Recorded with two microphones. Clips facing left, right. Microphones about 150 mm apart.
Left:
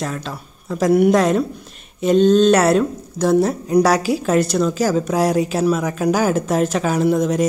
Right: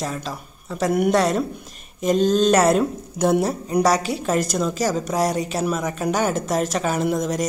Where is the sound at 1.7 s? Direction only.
40° right (ahead or behind).